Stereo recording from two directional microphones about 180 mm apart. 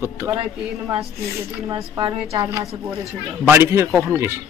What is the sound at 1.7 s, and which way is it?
A child's voice, 25° right (ahead or behind).